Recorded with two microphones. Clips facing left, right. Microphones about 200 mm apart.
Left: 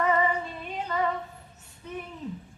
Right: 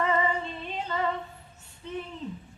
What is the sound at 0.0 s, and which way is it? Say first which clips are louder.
Female singing: left 1 dB; 25° right (ahead or behind).